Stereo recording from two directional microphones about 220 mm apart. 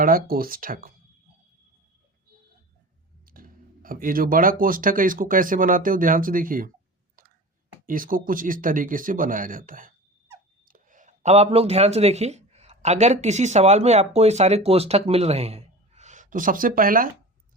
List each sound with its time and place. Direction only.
0.0 s speech: 40° right (ahead or behind)
3.2 s speech: 40° right (ahead or behind)
7.9 s speech: 40° right (ahead or behind)